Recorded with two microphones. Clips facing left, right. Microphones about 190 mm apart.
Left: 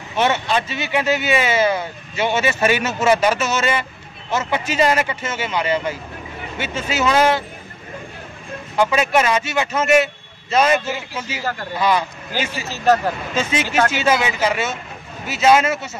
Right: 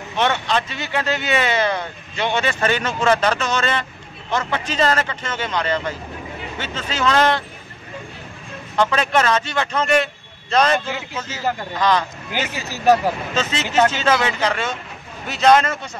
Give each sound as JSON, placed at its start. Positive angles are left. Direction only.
{"t": 0.2, "sound": "speech", "side_deg": 10}
{"t": 8.7, "sound": "speech", "side_deg": 10}
{"t": 12.5, "sound": "speech", "side_deg": 20}
{"t": 12.8, "sound": "speech", "side_deg": -10}
{"t": 13.3, "sound": "speech", "side_deg": 10}
{"t": 13.7, "sound": "speech", "side_deg": -25}
{"t": 13.9, "sound": "speech", "side_deg": 10}